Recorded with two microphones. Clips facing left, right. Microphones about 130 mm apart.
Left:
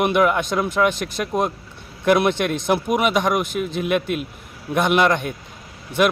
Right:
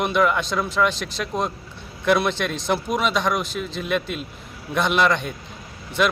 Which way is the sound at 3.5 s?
55° left (ahead or behind).